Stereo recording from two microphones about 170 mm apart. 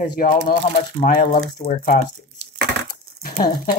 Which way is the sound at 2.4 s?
90° right.